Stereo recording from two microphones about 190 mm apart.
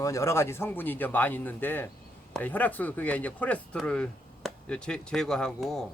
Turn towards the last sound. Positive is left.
turn(degrees=0)  # may be behind; listen again after turning